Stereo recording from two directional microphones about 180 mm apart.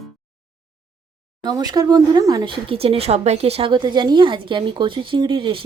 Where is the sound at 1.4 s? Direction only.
20° right (ahead or behind).